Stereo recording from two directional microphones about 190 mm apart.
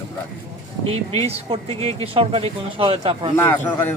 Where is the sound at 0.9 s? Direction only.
30° right (ahead or behind).